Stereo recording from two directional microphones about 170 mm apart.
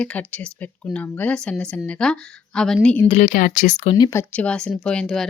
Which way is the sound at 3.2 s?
55° left (ahead or behind).